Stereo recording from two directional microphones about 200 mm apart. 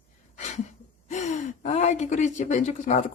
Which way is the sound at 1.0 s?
35° left (ahead or behind).